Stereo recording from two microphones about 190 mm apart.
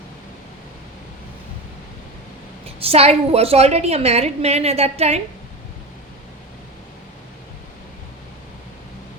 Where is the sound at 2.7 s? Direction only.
30° right (ahead or behind).